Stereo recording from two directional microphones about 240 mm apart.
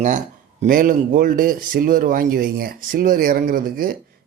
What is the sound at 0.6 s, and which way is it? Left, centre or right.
A man's voice, right.